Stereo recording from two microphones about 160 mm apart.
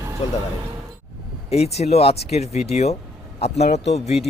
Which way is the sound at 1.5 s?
40° left (ahead or behind).